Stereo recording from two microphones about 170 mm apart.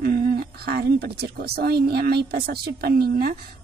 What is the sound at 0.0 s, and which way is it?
A woman's voice, 65° right (ahead or behind).